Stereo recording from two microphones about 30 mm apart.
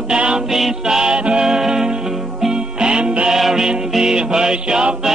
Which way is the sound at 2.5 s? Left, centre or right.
Right.